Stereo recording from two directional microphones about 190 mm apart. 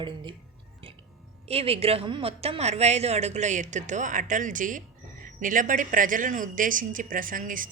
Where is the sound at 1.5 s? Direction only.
30° right (ahead or behind).